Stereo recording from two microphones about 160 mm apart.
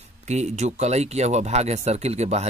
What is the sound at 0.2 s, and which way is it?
Speech, 45° right (ahead or behind).